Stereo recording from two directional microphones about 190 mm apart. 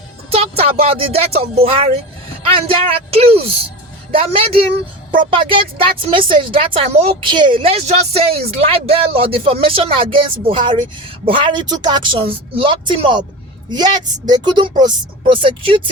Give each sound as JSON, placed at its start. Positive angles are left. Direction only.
{"t": 0.3, "sound": "a woman's voice", "side_deg": -30}